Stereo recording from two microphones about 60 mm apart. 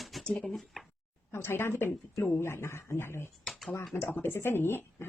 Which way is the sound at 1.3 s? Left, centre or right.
Left.